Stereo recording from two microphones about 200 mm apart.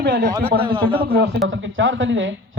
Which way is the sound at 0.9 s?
30° right (ahead or behind).